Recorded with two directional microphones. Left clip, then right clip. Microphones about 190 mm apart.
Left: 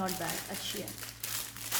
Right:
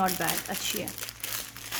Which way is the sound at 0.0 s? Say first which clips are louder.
Right 8 dB; 40° right (ahead or behind).